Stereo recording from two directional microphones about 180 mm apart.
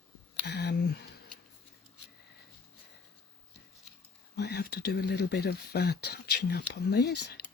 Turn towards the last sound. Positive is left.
turn(degrees=70)  # may be behind; listen again after turning